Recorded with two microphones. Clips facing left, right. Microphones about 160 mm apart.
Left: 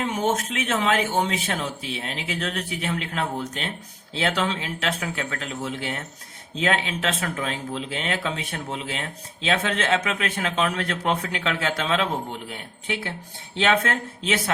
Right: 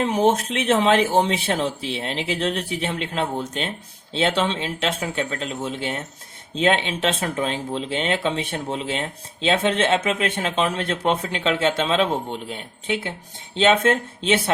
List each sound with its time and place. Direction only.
0.0 s speech: 30° right (ahead or behind)